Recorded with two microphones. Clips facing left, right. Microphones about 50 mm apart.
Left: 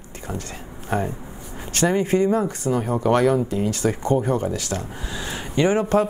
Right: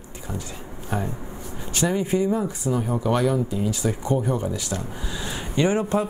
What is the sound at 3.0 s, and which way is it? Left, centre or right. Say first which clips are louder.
Speech: left 5 dB; left.